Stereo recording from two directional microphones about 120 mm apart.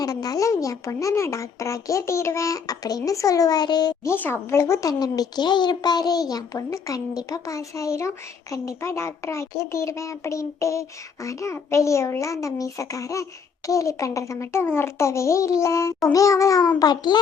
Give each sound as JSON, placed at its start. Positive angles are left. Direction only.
{"t": 0.0, "sound": "speech", "side_deg": 30}
{"t": 4.0, "sound": "a child's voice", "side_deg": 20}